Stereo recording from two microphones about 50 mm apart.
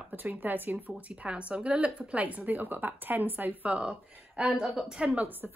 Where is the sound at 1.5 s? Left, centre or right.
Right.